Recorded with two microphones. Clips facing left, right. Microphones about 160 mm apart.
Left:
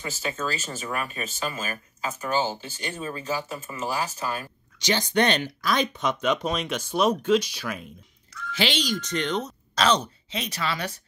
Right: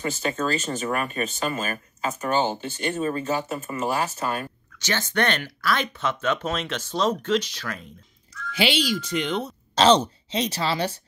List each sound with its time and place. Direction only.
0.0 s speech: 50° right (ahead or behind)
4.7 s speech: 15° left (ahead or behind)
8.5 s speech: 10° right (ahead or behind)
9.8 s speech: 30° right (ahead or behind)